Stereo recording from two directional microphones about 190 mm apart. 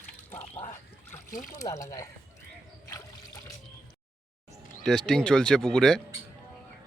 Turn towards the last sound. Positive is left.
turn(degrees=5)  # may be behind; listen again after turning